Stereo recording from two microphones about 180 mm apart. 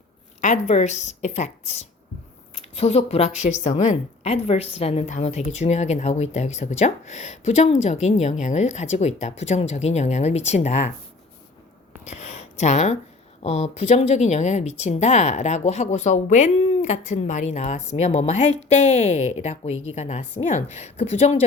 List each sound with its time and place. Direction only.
0.4 s speech: 40° left (ahead or behind)
12.0 s a sound: 40° left (ahead or behind)
13.4 s speech: 35° left (ahead or behind)